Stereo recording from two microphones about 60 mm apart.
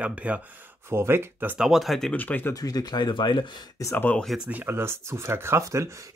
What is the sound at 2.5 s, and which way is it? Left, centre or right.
Speech, left.